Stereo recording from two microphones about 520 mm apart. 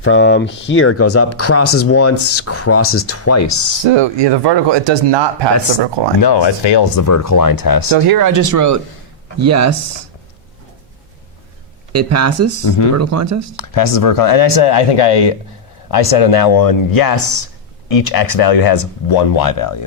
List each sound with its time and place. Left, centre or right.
0.0 s speech: left
3.8 s speech: right
6.2 s speech: left
6.9 s speech: left
7.9 s speech: right
11.9 s speech: right
12.6 s speech: left
13.0 s speech: right
13.6 s speech: left